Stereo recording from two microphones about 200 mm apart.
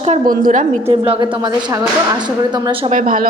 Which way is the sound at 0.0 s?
40° right (ahead or behind).